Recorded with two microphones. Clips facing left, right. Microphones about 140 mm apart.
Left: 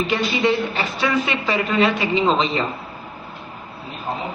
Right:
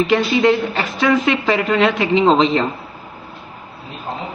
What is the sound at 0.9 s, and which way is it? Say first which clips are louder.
A man's voice: right 7 dB; 90° right.